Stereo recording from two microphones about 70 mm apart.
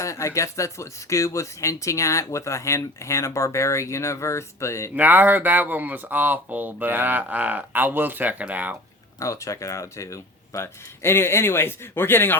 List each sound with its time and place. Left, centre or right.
0.0 s speech: left
4.9 s speech: right
9.1 s speech: left